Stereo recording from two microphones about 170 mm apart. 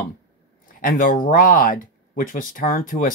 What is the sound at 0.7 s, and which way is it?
Speech, 55° left (ahead or behind).